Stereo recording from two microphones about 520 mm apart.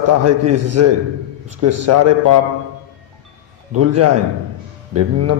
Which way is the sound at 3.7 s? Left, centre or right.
Right.